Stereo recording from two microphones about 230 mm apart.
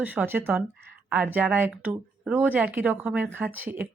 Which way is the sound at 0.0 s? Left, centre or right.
Centre.